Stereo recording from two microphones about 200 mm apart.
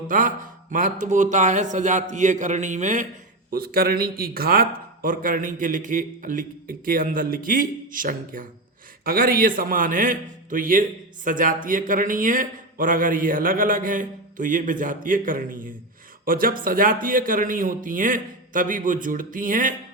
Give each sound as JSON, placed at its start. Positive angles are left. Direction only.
{"t": 0.1, "sound": "a man's voice", "side_deg": -40}